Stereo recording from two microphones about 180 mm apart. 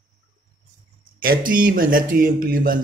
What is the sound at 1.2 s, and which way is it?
Speech, 50° right (ahead or behind).